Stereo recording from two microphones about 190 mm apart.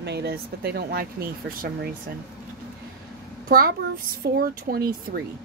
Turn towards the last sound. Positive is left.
turn(degrees=-50)  # may be behind; listen again after turning